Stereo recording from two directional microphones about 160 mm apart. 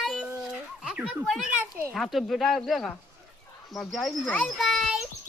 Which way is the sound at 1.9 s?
Centre (ahead or behind).